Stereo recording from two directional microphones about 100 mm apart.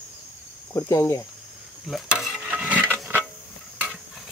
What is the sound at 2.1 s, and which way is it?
Stir, 5° right (ahead or behind).